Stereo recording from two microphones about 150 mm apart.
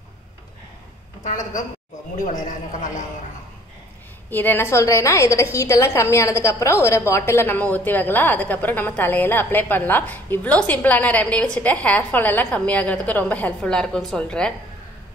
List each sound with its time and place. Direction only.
1.2 s a woman's voice: 55° left (ahead or behind)
4.3 s a woman's voice: 15° left (ahead or behind)